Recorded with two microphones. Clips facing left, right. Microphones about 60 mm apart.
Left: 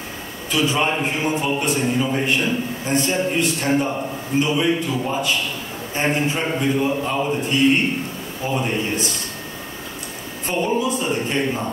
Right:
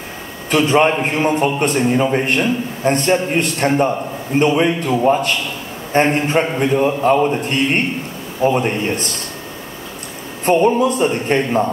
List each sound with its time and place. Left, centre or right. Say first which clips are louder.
0.5 s a man's voice: right 7 dB; right
10.4 s a man's voice: right 8 dB; right